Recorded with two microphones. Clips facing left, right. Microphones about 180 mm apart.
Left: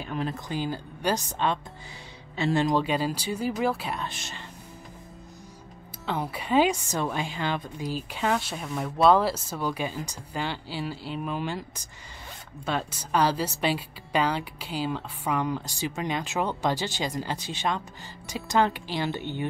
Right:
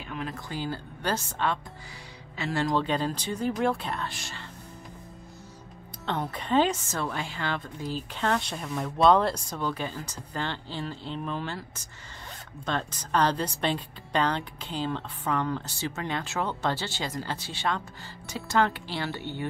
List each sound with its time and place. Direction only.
0.0 s speech: 35° left (ahead or behind)
0.3 s a woman's voice: 15° left (ahead or behind)
6.0 s a woman's voice: 5° left (ahead or behind)